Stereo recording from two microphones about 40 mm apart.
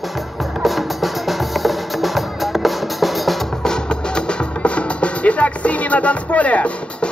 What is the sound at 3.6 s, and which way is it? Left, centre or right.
Music, centre.